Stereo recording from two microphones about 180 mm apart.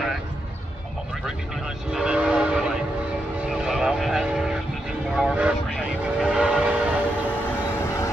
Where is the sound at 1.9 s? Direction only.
5° right (ahead or behind).